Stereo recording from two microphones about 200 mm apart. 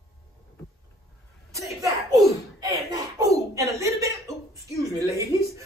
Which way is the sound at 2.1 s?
15° right (ahead or behind).